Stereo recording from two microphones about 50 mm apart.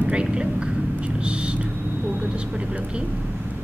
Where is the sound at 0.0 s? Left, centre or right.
Right.